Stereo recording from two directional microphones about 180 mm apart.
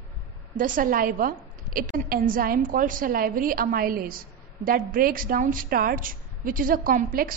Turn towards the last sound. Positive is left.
turn(degrees=-50)  # may be behind; listen again after turning